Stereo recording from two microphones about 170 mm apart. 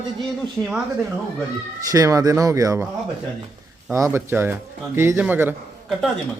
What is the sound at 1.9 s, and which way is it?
Speech, 20° right (ahead or behind).